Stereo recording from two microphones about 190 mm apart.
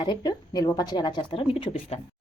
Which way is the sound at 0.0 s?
20° left (ahead or behind).